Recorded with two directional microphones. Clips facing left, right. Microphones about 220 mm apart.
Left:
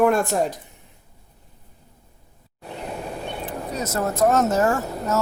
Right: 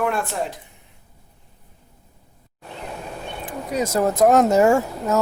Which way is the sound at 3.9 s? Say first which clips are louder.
Right 4 dB; 15° right (ahead or behind).